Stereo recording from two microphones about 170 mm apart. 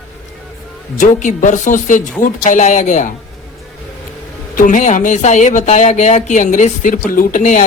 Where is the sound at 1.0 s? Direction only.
50° left (ahead or behind).